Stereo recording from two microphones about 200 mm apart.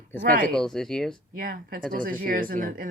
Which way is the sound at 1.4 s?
45° right (ahead or behind).